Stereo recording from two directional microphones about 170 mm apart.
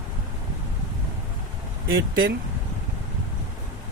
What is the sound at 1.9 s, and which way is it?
Speech, 60° right (ahead or behind).